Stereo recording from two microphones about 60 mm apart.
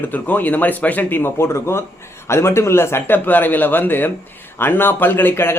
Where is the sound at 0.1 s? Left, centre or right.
Left.